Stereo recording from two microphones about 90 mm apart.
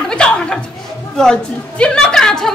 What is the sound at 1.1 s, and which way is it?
A woman's voice, 10° left (ahead or behind).